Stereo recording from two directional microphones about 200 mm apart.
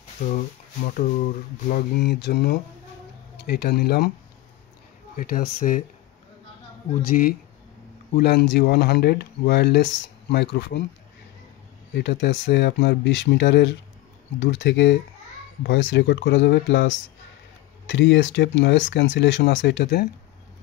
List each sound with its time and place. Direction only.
0.8 s speech: 40° left (ahead or behind)
5.1 s speech: 45° left (ahead or behind)
7.2 s speech: 35° left (ahead or behind)
8.2 s speech: 55° left (ahead or behind)
11.9 s speech: 60° left (ahead or behind)